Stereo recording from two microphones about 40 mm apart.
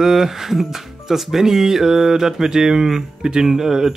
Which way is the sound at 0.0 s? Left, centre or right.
Centre.